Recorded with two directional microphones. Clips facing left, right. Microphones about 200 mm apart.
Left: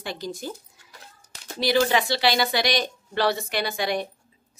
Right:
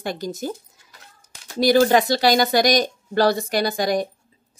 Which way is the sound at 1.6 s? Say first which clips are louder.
Right 6 dB; 45° right (ahead or behind).